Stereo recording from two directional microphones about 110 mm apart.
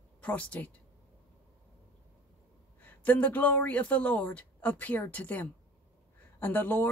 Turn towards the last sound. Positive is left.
turn(degrees=15)  # may be behind; listen again after turning